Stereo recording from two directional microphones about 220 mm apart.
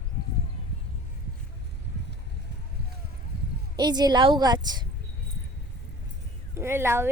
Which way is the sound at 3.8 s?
20° right (ahead or behind).